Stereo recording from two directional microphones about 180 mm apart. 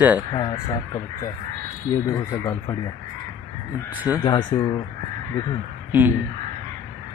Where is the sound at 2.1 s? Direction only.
15° left (ahead or behind).